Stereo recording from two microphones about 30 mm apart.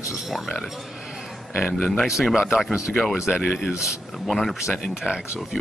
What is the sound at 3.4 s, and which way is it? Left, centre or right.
Speech, centre.